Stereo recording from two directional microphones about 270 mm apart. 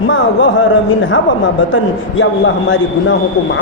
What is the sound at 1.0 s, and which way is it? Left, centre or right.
A man's voice, left.